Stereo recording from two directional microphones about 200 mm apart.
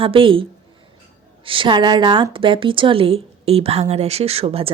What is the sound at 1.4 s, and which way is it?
A woman's voice, 25° right (ahead or behind).